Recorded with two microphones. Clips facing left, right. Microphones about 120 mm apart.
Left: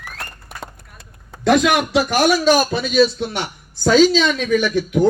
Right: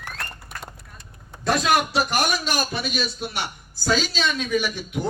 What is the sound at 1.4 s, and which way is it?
Speech, 90° left.